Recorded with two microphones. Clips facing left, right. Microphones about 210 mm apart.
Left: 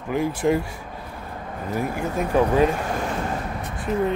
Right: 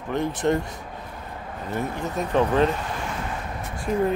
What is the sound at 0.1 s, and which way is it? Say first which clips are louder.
Speech: left 2 dB; 5° left (ahead or behind).